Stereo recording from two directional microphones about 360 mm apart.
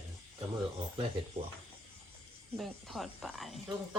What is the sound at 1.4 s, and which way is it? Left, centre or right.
Speech, centre.